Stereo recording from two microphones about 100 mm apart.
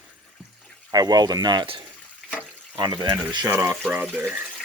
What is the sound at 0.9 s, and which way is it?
Speech, 40° right (ahead or behind).